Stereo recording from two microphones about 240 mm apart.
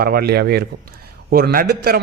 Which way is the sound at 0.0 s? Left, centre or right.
Right.